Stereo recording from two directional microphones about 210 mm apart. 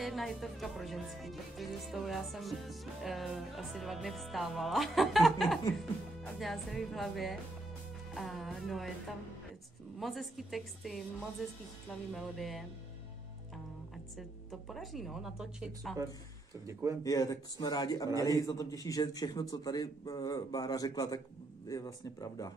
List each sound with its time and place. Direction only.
0.0 s music: centre (ahead or behind)
14.1 s music: centre (ahead or behind)
17.0 s a man's voice: 15° left (ahead or behind)